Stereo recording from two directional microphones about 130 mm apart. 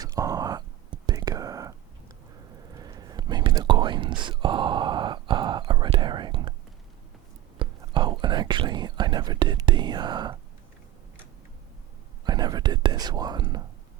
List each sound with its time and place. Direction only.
0.0 s a sound: 30° right (ahead or behind)
1.0 s whispering: 30° right (ahead or behind)
2.7 s whispering: 30° right (ahead or behind)
7.6 s whispering: 40° right (ahead or behind)
12.2 s whispering: 30° right (ahead or behind)